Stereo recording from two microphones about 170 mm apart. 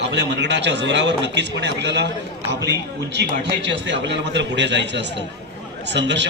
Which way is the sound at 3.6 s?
90° right.